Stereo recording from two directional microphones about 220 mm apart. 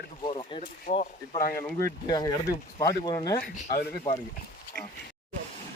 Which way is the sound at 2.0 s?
15° left (ahead or behind).